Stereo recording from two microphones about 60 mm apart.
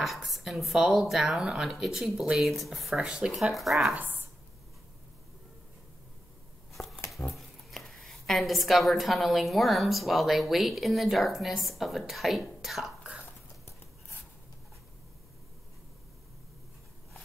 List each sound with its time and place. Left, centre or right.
0.0 s a woman's voice: centre
3.0 s speech: centre
3.3 s a woman's voice: centre
6.7 s a sound: centre
7.3 s a woman's voice: centre